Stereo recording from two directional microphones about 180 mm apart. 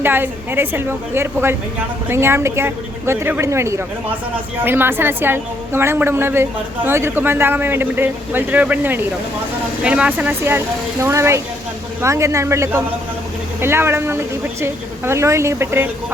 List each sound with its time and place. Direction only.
0.0 s a woman's voice: 10° right (ahead or behind)